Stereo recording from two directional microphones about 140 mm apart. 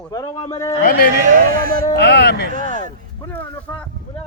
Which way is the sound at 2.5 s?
70° right (ahead or behind).